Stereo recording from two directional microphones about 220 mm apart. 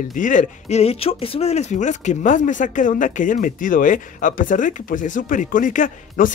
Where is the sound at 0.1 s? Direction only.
35° left (ahead or behind).